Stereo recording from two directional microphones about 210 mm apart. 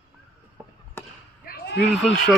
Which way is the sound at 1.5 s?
50° left (ahead or behind).